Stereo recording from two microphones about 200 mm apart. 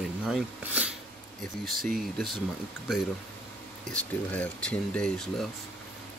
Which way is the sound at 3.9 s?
5° left (ahead or behind).